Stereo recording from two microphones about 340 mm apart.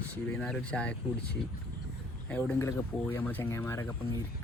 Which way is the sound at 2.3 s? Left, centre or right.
Centre.